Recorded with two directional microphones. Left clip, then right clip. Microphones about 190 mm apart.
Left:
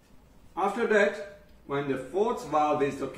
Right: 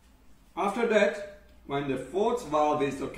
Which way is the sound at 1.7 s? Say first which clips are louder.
Left 1 dB; 15° right (ahead or behind).